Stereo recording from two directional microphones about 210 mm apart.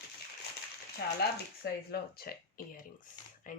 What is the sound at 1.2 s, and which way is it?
Speech, 50° left (ahead or behind).